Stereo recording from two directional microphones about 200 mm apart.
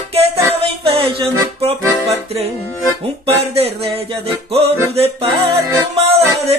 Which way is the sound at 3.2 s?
30° right (ahead or behind).